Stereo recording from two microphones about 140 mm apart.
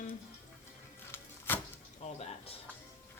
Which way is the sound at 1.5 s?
15° left (ahead or behind).